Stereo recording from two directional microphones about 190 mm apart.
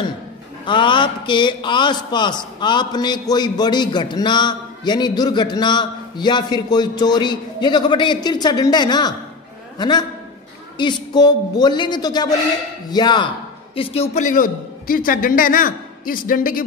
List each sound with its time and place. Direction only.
0.7 s a man's voice: 25° left (ahead or behind); by 16.6 s 50° left (ahead or behind)